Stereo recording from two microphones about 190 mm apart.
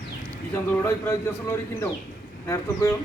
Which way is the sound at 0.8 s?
15° left (ahead or behind).